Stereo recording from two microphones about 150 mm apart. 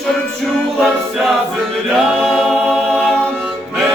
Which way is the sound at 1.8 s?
Centre (ahead or behind).